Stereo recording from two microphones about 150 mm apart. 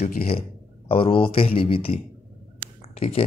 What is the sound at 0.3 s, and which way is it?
Speech, 40° left (ahead or behind).